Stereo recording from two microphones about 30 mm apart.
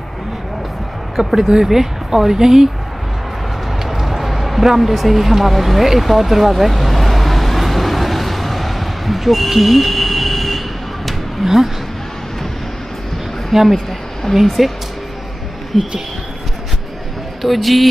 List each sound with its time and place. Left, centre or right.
1.2 s speech: centre
3.8 s a sound: centre
11.4 s speech: centre
13.5 s a man's voice: centre
17.4 s a man's voice: centre